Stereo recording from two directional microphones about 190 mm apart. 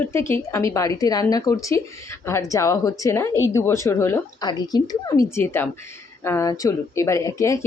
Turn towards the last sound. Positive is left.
turn(degrees=15)  # may be behind; listen again after turning